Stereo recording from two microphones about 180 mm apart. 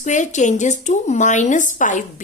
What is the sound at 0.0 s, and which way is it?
Speech, 45° left (ahead or behind).